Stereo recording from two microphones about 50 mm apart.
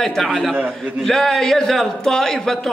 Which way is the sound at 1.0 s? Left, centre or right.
Centre.